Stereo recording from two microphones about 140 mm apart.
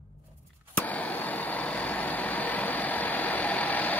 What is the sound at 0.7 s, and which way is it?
Vehicle, 10° left (ahead or behind).